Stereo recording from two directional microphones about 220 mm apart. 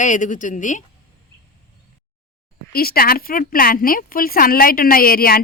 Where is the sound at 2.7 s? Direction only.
40° left (ahead or behind).